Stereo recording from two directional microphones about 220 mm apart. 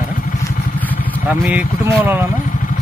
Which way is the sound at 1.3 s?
5° right (ahead or behind).